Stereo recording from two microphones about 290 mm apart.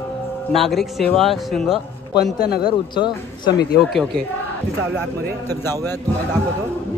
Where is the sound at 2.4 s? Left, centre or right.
Left.